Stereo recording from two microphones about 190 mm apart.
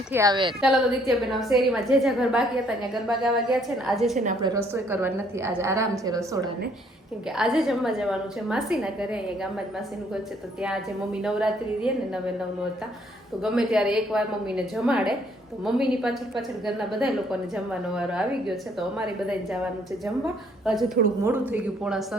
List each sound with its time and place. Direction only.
0.1 s a woman's voice: 20° right (ahead or behind)
0.6 s a woman's voice: centre (ahead or behind)
4.4 s a woman's voice: 15° right (ahead or behind)
7.3 s a woman's voice: 5° right (ahead or behind)
13.4 s a woman's voice: 5° right (ahead or behind)
21.2 s a woman's voice: 10° right (ahead or behind)